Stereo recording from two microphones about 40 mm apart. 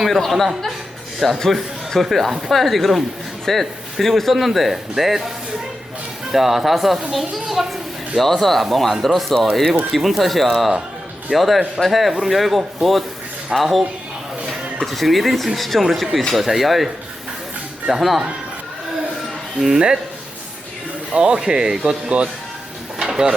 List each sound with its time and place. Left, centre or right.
0.0 s speech: centre
6.3 s a child's voice: centre
8.2 s speech: centre
18.0 s speech: centre
19.5 s speech: centre
21.1 s speech: right
23.0 s a sound: right